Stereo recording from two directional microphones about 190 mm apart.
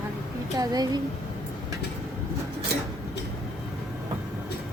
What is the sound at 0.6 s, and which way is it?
Speech, 20° right (ahead or behind).